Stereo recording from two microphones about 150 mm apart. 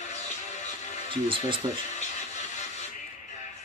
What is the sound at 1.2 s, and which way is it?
Speech, 35° right (ahead or behind).